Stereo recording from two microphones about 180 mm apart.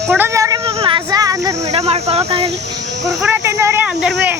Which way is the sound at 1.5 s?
40° right (ahead or behind).